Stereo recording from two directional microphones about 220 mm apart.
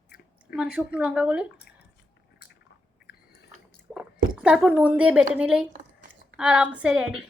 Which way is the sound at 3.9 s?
5° right (ahead or behind).